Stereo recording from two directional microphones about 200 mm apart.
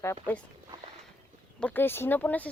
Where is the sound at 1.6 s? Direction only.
10° left (ahead or behind).